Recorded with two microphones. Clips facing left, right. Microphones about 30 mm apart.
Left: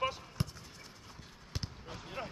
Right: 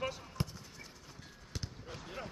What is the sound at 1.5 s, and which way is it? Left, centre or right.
Basketball bounce, left.